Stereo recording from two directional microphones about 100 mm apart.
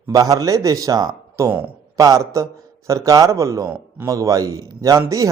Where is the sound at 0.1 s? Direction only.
35° right (ahead or behind).